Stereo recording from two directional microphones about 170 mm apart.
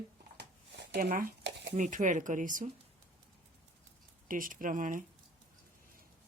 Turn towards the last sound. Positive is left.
turn(degrees=-50)  # may be behind; listen again after turning